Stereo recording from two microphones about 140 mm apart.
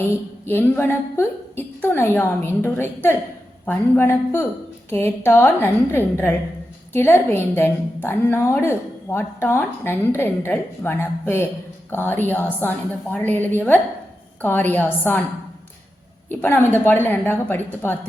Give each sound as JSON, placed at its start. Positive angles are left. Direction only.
{"t": 0.4, "sound": "a woman's voice", "side_deg": 15}
{"t": 16.3, "sound": "a woman's voice", "side_deg": 15}